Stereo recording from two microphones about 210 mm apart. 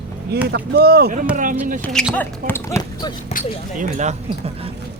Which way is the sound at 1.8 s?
5° left (ahead or behind).